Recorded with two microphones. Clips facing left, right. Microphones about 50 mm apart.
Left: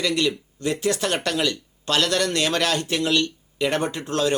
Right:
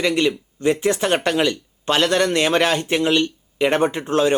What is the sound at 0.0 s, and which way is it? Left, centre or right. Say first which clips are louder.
Speech: right 4 dB; right.